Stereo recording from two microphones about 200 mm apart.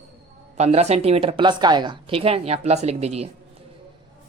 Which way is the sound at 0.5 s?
35° right (ahead or behind).